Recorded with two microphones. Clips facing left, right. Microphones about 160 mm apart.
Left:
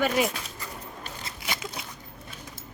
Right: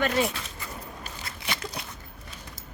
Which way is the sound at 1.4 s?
Centre (ahead or behind).